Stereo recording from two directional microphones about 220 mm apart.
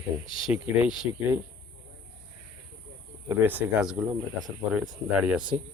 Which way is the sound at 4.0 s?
20° right (ahead or behind).